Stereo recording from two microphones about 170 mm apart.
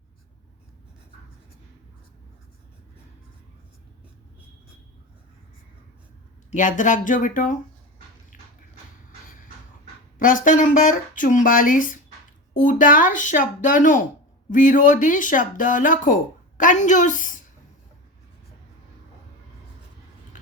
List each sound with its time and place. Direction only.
6.5 s speech: 50° left (ahead or behind)
10.2 s a woman's voice: 50° left (ahead or behind)